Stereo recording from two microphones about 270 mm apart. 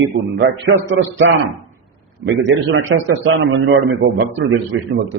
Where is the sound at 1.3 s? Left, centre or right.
Right.